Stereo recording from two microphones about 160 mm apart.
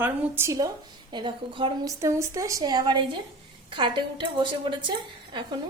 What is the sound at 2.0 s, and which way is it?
A woman's voice, 20° right (ahead or behind).